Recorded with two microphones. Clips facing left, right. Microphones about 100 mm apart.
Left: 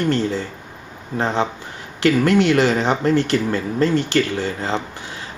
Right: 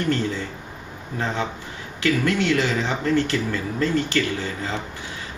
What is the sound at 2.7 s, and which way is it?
Speech, 70° left (ahead or behind).